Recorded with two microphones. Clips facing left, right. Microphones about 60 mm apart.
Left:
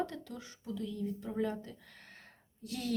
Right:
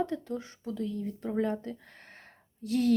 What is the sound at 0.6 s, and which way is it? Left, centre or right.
Speech, right.